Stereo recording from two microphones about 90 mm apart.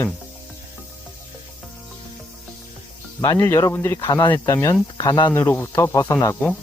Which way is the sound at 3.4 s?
35° left (ahead or behind).